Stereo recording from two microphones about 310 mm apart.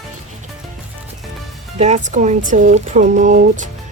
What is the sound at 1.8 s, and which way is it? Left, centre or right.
Speech, right.